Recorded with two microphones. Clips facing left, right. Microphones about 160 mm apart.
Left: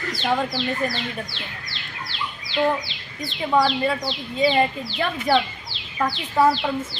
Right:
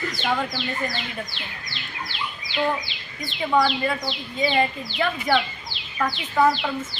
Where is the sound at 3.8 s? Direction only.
30° left (ahead or behind).